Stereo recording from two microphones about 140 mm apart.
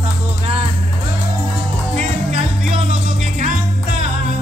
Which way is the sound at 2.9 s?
65° right (ahead or behind).